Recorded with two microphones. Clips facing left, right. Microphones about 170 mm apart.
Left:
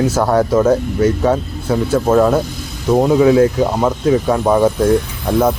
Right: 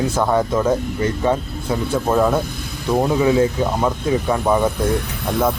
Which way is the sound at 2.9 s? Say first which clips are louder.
Left 5 dB; 15° left (ahead or behind).